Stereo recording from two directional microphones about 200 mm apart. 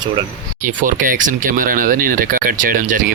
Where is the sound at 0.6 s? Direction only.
40° right (ahead or behind).